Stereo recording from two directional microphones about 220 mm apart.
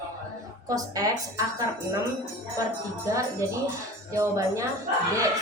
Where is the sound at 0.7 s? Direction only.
15° right (ahead or behind).